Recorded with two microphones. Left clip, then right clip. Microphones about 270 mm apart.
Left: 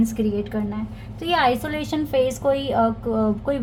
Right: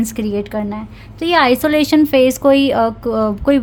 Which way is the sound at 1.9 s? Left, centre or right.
Right.